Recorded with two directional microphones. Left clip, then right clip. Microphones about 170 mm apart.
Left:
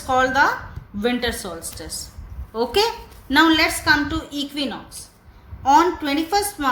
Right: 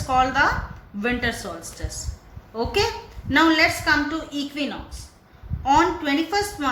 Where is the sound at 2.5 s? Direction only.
30° left (ahead or behind).